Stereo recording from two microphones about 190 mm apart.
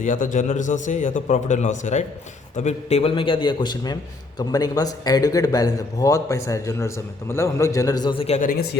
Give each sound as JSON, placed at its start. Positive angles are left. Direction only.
{"t": 0.0, "sound": "a man's voice", "side_deg": 45}
{"t": 8.4, "sound": "speech", "side_deg": 50}